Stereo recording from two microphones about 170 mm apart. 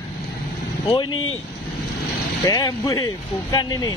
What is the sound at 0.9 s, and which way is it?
Speech, 25° left (ahead or behind).